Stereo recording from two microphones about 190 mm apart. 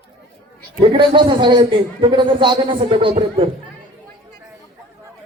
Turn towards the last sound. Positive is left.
turn(degrees=-30)  # may be behind; listen again after turning